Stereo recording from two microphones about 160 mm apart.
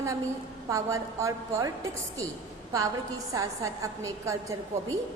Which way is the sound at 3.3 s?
20° right (ahead or behind).